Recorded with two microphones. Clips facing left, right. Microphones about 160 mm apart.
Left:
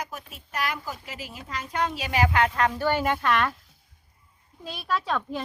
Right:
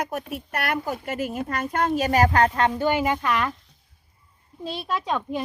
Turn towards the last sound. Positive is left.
turn(degrees=-20)  # may be behind; listen again after turning